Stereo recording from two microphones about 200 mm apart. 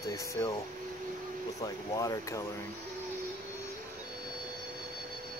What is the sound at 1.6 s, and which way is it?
Speech, 15° left (ahead or behind).